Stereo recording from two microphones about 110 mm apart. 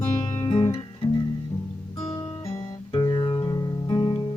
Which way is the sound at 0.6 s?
60° left (ahead or behind).